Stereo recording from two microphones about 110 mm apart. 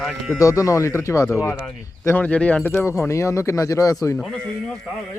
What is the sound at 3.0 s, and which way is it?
Speech, 25° left (ahead or behind).